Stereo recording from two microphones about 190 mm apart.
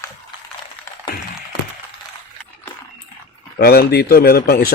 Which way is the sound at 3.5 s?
55° left (ahead or behind).